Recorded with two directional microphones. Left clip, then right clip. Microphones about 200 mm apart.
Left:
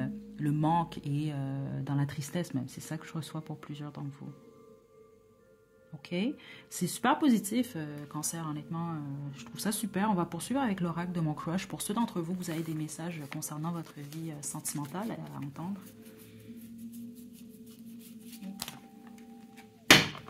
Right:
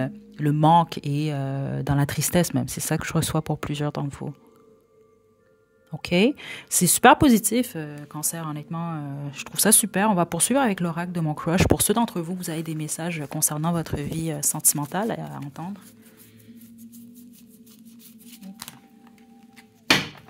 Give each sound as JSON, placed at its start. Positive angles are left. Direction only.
{"t": 0.0, "sound": "music", "side_deg": -35}
{"t": 5.9, "sound": "speech", "side_deg": -50}
{"t": 13.4, "sound": "music", "side_deg": -45}